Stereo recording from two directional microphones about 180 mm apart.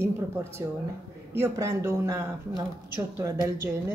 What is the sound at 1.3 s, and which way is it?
A woman's voice, 15° right (ahead or behind).